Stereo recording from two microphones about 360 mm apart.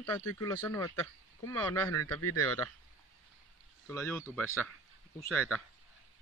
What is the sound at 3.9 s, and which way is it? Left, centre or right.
Speech, centre.